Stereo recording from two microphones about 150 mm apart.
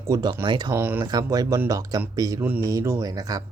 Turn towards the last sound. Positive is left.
turn(degrees=-25)  # may be behind; listen again after turning